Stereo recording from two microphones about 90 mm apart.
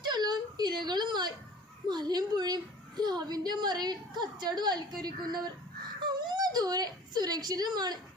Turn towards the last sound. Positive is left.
turn(degrees=-50)  # may be behind; listen again after turning